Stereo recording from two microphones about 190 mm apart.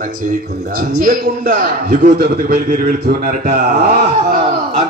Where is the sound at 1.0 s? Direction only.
50° right (ahead or behind).